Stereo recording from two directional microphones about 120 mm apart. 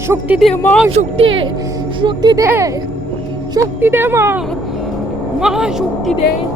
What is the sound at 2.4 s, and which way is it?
Speech, 20° right (ahead or behind).